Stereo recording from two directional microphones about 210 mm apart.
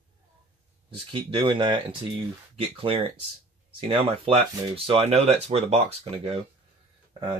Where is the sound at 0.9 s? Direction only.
25° right (ahead or behind).